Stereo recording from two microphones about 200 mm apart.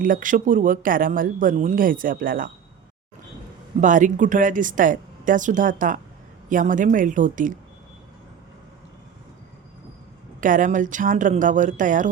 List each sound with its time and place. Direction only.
0.0 s speech: 40° right (ahead or behind)
3.8 s speech: 40° right (ahead or behind)
10.4 s speech: 40° right (ahead or behind)